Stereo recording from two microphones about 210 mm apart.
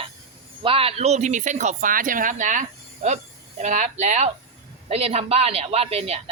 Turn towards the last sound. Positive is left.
turn(degrees=-30)  # may be behind; listen again after turning